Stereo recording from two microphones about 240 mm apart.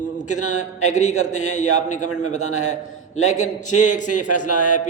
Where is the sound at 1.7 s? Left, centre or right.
Left.